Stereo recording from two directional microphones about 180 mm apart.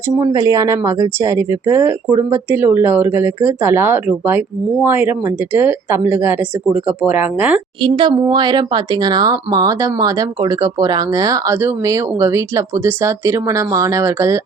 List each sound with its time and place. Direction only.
0.2 s speech: 20° right (ahead or behind)
7.8 s speech: 25° right (ahead or behind)